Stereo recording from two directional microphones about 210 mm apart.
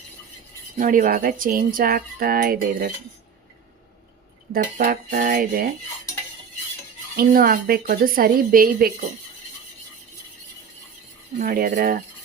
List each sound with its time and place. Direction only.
0.8 s speech: 40° right (ahead or behind)
4.5 s a woman's voice: 45° right (ahead or behind)
7.2 s a woman's voice: 45° right (ahead or behind)
11.3 s a woman's voice: 40° right (ahead or behind)